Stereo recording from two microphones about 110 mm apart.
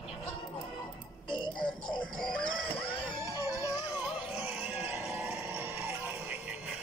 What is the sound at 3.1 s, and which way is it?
Music, 30° right (ahead or behind).